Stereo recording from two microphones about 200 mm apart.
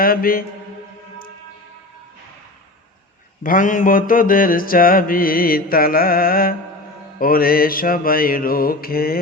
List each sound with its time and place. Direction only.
0.0 s mantra: 45° left (ahead or behind)
3.4 s mantra: 40° left (ahead or behind)